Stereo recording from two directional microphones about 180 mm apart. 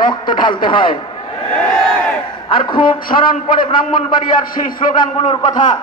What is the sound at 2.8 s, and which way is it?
Speech, 50° left (ahead or behind).